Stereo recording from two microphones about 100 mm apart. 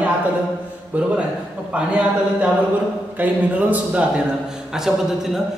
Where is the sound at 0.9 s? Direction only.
15° right (ahead or behind).